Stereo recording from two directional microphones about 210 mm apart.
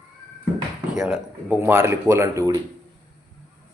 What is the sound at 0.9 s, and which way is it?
Speech, 5° right (ahead or behind).